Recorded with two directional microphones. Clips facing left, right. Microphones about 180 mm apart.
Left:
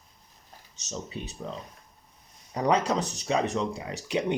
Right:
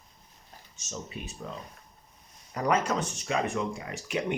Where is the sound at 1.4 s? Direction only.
25° left (ahead or behind).